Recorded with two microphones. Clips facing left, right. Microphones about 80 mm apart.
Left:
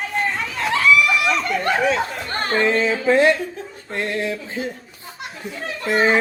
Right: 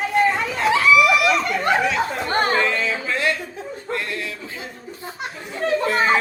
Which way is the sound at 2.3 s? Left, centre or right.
Centre.